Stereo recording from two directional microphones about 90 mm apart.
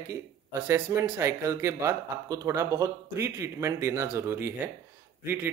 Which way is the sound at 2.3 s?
40° right (ahead or behind).